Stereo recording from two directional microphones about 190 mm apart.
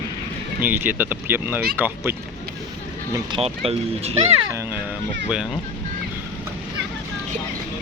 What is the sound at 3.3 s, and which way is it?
Speech, 25° right (ahead or behind).